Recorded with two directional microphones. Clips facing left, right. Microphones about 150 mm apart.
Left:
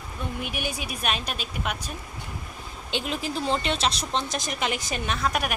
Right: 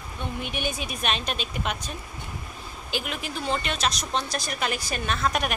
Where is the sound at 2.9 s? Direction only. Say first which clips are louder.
Left 3 dB; 30° left (ahead or behind).